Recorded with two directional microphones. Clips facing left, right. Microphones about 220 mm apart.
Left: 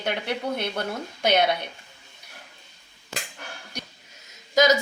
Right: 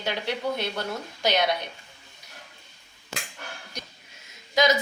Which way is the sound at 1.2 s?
55° left (ahead or behind).